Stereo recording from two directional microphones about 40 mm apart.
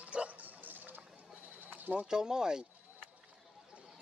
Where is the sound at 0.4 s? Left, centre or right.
Right.